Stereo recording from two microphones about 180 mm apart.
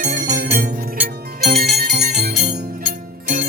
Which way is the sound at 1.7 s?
60° right (ahead or behind).